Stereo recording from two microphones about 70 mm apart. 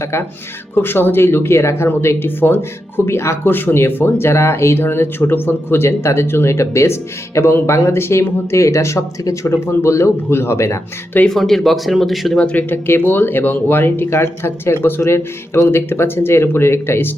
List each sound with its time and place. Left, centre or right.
0.0 s speech: left
11.3 s speech: centre
12.4 s speech: centre
12.7 s speech: left